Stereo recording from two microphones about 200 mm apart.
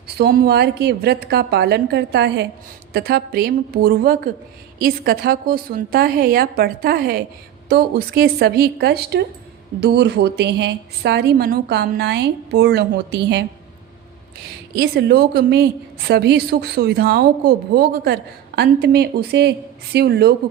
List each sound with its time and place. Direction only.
0.2 s a woman's voice: 50° right (ahead or behind)
14.8 s a woman's voice: 55° right (ahead or behind)